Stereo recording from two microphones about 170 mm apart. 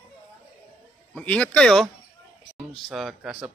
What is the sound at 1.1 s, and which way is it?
Speech, 5° left (ahead or behind).